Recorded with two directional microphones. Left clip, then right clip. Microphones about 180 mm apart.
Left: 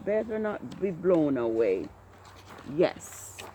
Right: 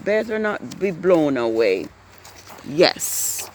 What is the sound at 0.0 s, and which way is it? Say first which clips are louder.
Speech: right 8 dB; 45° right (ahead or behind).